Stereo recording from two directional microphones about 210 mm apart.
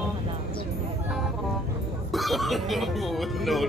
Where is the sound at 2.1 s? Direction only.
Centre (ahead or behind).